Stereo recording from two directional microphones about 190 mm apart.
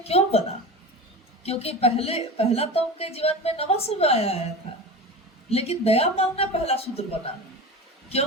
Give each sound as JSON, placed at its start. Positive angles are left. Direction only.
{"t": 0.0, "sound": "a woman's voice", "side_deg": 30}
{"t": 1.5, "sound": "a woman's voice", "side_deg": 30}
{"t": 5.5, "sound": "a woman's voice", "side_deg": 30}